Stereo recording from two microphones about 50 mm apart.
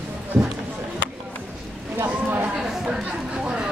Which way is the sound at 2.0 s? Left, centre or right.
Right.